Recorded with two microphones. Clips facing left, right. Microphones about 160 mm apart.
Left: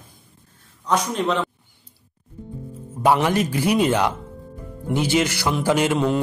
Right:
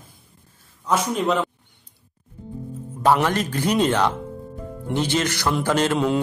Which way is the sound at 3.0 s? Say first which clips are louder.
Left 1 dB; 10° left (ahead or behind).